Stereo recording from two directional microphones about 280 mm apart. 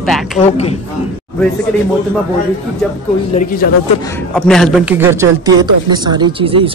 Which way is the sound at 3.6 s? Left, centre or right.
Left.